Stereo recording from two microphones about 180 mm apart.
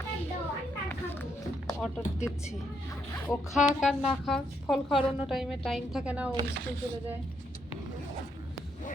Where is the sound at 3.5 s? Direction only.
Centre (ahead or behind).